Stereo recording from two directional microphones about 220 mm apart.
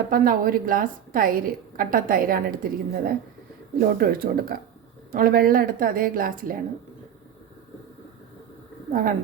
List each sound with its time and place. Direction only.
0.1 s a woman's voice: 40° right (ahead or behind)
8.9 s speech: 40° right (ahead or behind)